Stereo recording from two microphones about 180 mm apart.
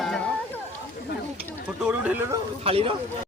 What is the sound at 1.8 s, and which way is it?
Speech, 5° right (ahead or behind).